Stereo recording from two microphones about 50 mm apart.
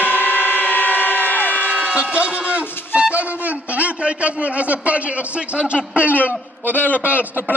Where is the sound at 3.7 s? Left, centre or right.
Right.